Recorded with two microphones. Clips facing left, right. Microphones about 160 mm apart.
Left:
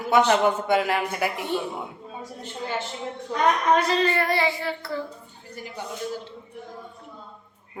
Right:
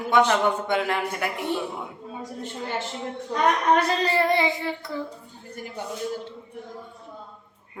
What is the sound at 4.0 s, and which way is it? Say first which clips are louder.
Child singing: right 1 dB; 30° right (ahead or behind).